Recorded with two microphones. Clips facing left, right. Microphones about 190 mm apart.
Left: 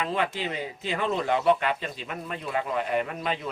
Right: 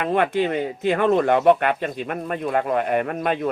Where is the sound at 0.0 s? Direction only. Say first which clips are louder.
Right 8 dB; 55° right (ahead or behind).